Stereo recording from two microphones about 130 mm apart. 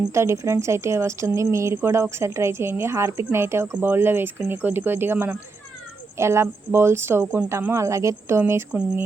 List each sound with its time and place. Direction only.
0.1 s a woman's voice: 20° right (ahead or behind)